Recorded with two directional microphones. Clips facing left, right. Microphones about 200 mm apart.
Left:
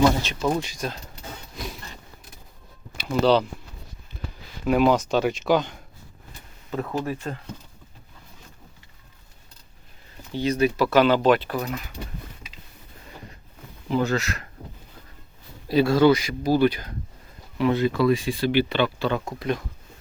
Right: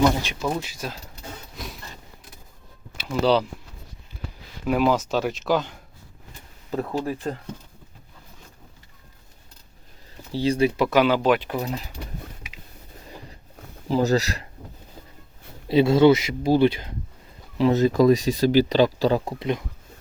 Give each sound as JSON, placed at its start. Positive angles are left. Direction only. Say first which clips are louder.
{"t": 0.2, "sound": "speech", "louder": "left 2 dB", "side_deg": -10}
{"t": 1.6, "sound": "a sound", "louder": "left 4 dB", "side_deg": 0}
{"t": 3.0, "sound": "speech", "louder": "left 1 dB", "side_deg": -5}
{"t": 4.1, "sound": "a sound", "louder": "even", "side_deg": -10}
{"t": 4.6, "sound": "speech", "louder": "left 2 dB", "side_deg": 0}
{"t": 6.8, "sound": "speech", "louder": "even", "side_deg": -25}
{"t": 10.3, "sound": "speech", "louder": "right 1 dB", "side_deg": -30}
{"t": 10.8, "sound": "speech", "louder": "left 3 dB", "side_deg": -10}
{"t": 13.8, "sound": "speech", "louder": "right 3 dB", "side_deg": -35}
{"t": 15.7, "sound": "speech", "louder": "right 2 dB", "side_deg": -25}
{"t": 17.7, "sound": "speech", "louder": "right 6 dB", "side_deg": -40}